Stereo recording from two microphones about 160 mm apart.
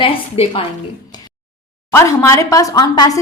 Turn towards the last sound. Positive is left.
turn(degrees=25)  # may be behind; listen again after turning